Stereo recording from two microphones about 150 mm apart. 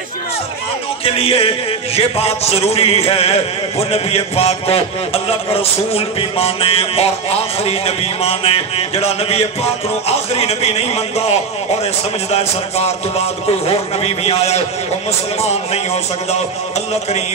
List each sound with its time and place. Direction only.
1.0 s a man's voice: 40° left (ahead or behind)